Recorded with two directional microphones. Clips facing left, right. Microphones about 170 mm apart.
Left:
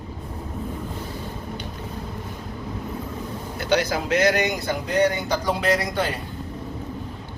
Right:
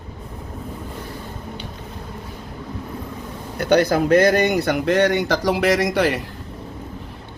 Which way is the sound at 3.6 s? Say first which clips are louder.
Right 6 dB; 55° right (ahead or behind).